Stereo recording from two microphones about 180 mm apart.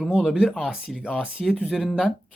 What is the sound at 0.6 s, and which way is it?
Speech, 5° right (ahead or behind).